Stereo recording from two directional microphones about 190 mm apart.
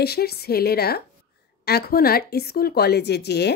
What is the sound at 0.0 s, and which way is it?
A woman's voice, 55° left (ahead or behind).